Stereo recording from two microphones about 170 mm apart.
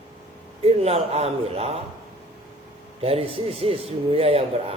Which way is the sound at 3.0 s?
35° right (ahead or behind).